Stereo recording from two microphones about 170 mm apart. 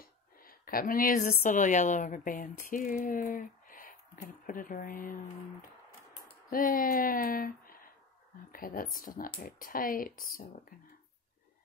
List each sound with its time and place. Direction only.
0.0 s a woman's voice: 60° left (ahead or behind)
6.5 s speech: 55° left (ahead or behind)